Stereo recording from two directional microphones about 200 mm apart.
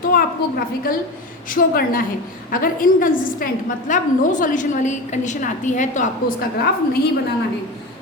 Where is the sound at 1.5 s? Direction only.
45° left (ahead or behind).